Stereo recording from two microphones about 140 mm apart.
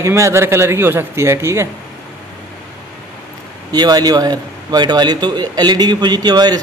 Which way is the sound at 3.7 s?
30° right (ahead or behind).